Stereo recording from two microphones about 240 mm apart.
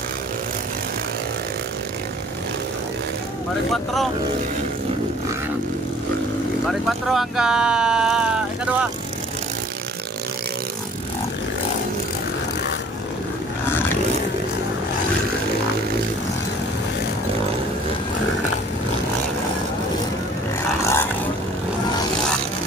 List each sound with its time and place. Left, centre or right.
3.7 s speech: centre
6.7 s speech: centre
20.8 s vehicle: centre